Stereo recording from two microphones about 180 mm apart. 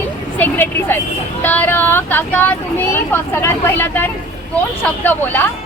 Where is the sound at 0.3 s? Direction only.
10° left (ahead or behind).